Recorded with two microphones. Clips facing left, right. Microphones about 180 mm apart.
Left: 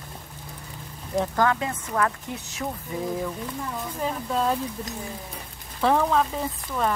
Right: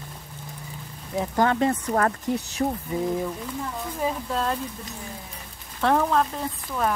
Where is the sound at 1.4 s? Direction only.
35° right (ahead or behind).